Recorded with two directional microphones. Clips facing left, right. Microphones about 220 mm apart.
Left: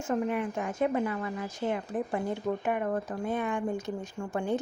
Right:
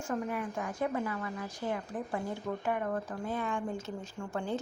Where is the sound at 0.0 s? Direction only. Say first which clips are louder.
Left 5 dB; 20° left (ahead or behind).